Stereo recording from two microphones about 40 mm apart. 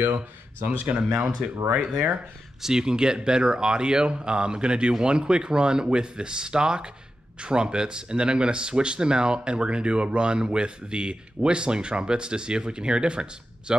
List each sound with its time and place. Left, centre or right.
0.0 s speech: right
0.8 s speech: right
2.6 s speech: centre